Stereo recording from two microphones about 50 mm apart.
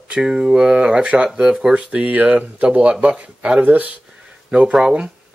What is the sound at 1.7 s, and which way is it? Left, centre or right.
Speech, right.